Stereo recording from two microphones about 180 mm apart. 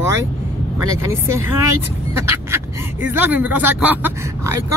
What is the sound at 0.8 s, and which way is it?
Speech, 15° right (ahead or behind).